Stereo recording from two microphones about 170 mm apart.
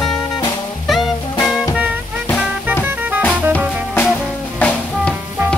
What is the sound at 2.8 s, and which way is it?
Music, 10° right (ahead or behind).